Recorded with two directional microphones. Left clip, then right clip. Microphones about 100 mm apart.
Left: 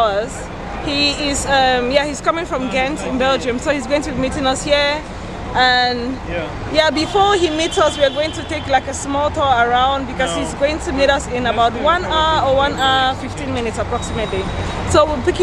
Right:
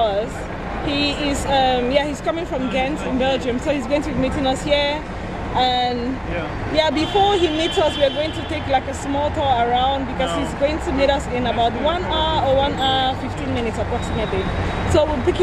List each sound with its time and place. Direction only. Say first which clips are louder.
0.0 s vehicle: left 3 dB; 20° left (ahead or behind)
0.8 s speech: left 4 dB; 20° left (ahead or behind)